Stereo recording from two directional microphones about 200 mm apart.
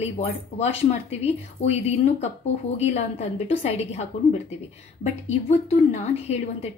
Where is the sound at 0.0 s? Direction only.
30° left (ahead or behind).